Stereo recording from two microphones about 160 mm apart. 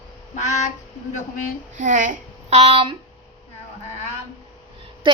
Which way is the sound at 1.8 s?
55° right (ahead or behind).